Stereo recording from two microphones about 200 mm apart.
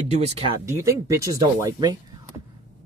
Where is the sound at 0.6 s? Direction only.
15° right (ahead or behind).